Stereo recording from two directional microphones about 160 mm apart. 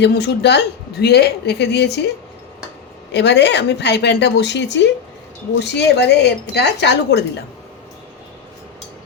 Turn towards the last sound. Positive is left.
turn(degrees=90)